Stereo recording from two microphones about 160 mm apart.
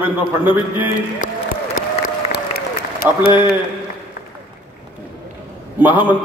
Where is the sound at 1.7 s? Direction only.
70° left (ahead or behind).